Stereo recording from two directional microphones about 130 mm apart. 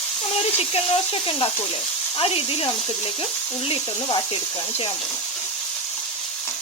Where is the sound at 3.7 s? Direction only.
40° left (ahead or behind).